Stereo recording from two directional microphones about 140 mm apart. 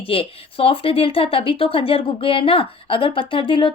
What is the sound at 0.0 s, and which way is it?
Speech, 40° left (ahead or behind).